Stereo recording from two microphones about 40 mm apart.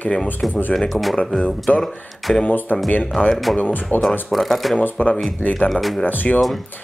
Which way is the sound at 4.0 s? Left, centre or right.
Centre.